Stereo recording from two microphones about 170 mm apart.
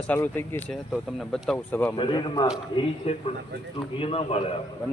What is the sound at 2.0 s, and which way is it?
Speech, 25° left (ahead or behind).